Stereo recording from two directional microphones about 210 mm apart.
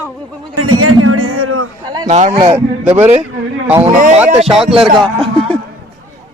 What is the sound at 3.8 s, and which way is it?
Speech, 30° right (ahead or behind).